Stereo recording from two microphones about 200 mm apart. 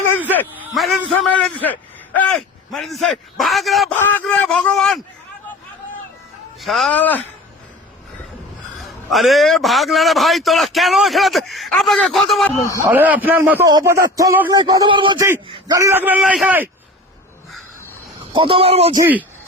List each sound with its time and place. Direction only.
0.5 s a man's voice: 5° right (ahead or behind)
6.6 s a man's voice: centre (ahead or behind)
8.8 s a man's voice: centre (ahead or behind)
12.5 s speech: 15° left (ahead or behind)
12.8 s a man's voice: 10° right (ahead or behind)
18.3 s speech: 25° right (ahead or behind)